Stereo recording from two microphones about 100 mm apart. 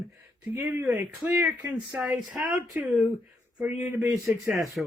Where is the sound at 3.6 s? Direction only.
25° right (ahead or behind).